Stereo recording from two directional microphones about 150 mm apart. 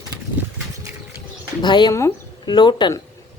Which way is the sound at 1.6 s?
30° left (ahead or behind).